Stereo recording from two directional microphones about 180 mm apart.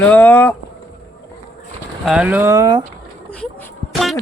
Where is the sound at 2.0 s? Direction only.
5° right (ahead or behind).